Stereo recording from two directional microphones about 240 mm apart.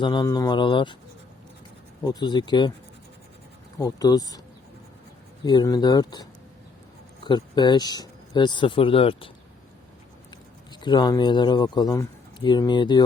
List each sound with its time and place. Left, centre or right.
0.0 s speech: centre
2.0 s speech: centre
3.8 s speech: centre
5.5 s speech: centre
7.3 s speech: centre
10.8 s speech: centre